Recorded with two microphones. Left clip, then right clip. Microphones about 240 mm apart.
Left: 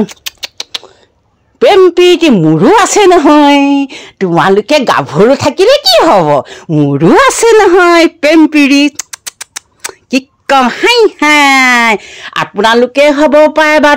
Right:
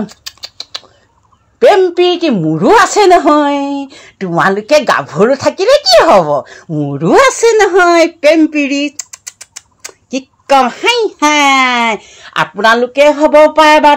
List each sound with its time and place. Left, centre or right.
0.0 s rodents: left
1.6 s a woman's voice: left